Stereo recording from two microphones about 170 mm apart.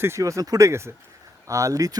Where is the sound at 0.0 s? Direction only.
15° right (ahead or behind).